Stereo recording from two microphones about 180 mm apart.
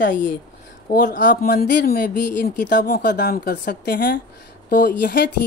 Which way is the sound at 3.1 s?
60° left (ahead or behind).